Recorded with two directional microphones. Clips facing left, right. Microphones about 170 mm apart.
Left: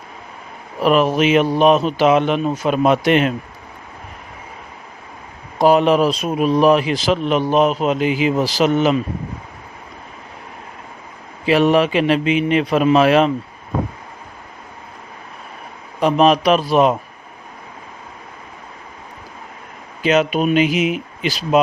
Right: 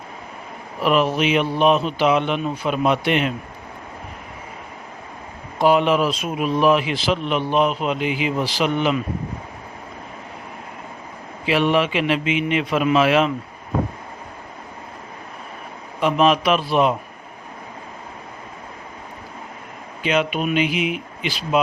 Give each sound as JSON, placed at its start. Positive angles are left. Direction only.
{"t": 0.8, "sound": "a man's voice", "side_deg": 45}
{"t": 5.5, "sound": "speech", "side_deg": 40}
{"t": 11.4, "sound": "speech", "side_deg": 40}
{"t": 16.0, "sound": "speech", "side_deg": 40}
{"t": 20.0, "sound": "speech", "side_deg": 40}